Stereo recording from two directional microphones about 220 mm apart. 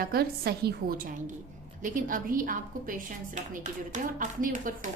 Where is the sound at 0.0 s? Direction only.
45° right (ahead or behind).